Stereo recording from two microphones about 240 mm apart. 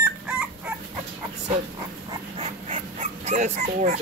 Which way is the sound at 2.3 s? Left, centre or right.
Right.